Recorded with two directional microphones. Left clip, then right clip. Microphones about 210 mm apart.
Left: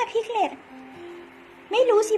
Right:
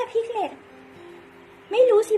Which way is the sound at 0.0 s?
25° left (ahead or behind).